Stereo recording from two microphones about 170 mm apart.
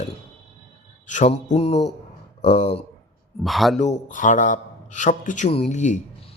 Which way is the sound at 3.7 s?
45° left (ahead or behind).